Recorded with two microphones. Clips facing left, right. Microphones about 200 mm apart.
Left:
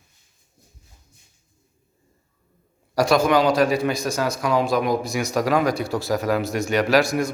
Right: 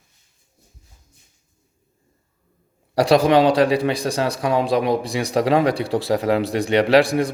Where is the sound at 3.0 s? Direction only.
35° right (ahead or behind).